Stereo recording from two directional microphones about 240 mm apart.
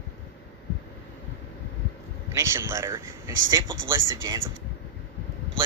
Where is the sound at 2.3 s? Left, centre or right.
Centre.